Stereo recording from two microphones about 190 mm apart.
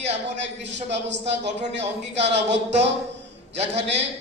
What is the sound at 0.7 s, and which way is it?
Speech, 70° right (ahead or behind).